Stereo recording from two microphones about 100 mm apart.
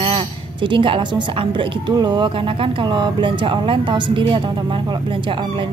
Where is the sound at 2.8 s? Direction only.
50° right (ahead or behind).